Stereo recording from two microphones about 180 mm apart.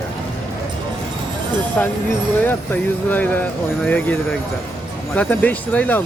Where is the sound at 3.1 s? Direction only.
10° left (ahead or behind).